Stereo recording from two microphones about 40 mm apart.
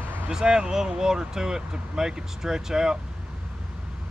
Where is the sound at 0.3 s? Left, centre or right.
Centre.